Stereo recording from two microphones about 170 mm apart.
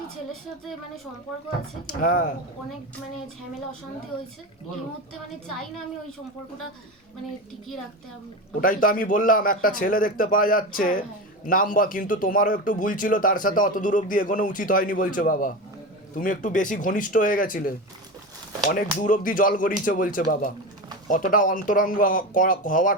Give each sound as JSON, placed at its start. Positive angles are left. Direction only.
{"t": 1.9, "sound": "a man's voice", "side_deg": 55}
{"t": 8.6, "sound": "a man's voice", "side_deg": 55}
{"t": 19.0, "sound": "a man's voice", "side_deg": 50}